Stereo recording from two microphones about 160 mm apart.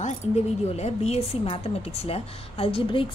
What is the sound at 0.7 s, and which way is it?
A woman's voice, 40° left (ahead or behind).